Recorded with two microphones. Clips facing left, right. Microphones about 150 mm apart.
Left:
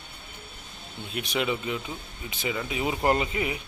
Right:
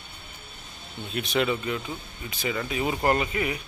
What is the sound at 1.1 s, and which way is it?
Speech, 10° left (ahead or behind).